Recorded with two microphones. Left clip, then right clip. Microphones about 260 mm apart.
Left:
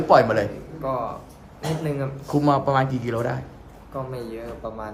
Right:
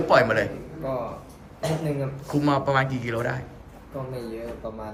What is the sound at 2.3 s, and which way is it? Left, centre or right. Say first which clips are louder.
A man's voice: left 3 dB; centre.